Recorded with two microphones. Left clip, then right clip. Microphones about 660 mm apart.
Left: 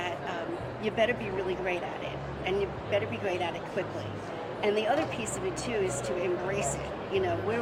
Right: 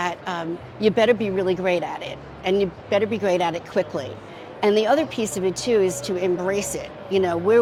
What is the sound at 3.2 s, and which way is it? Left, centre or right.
Speech, right.